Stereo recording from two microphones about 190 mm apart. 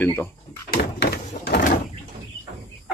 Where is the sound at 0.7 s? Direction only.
60° left (ahead or behind).